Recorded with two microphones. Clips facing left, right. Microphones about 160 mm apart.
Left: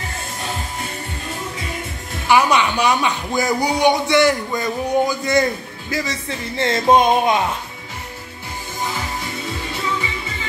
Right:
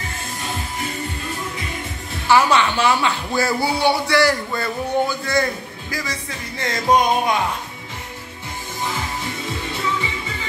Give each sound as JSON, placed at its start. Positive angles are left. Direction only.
{"t": 2.2, "sound": "speech", "side_deg": 15}
{"t": 6.6, "sound": "music", "side_deg": 25}